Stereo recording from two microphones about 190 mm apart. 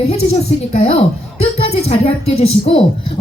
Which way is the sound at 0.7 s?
35° left (ahead or behind).